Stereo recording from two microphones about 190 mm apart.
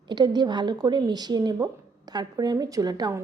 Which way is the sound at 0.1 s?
20° right (ahead or behind).